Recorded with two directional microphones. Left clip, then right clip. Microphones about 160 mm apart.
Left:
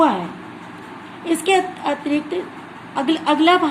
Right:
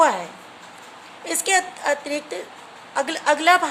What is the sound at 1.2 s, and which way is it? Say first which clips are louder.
A woman's voice: left 4 dB; 45° right (ahead or behind).